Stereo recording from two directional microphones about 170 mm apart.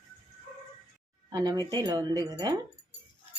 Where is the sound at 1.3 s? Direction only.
20° right (ahead or behind).